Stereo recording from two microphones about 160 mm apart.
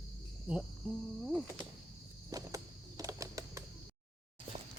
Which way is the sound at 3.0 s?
20° right (ahead or behind).